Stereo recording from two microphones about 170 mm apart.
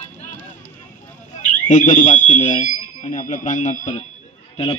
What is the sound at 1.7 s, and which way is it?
A man's voice, 45° left (ahead or behind).